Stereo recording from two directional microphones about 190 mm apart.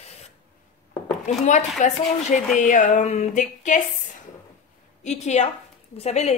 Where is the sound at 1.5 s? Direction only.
40° left (ahead or behind).